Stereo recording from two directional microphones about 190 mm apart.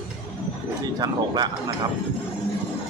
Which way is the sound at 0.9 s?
20° right (ahead or behind).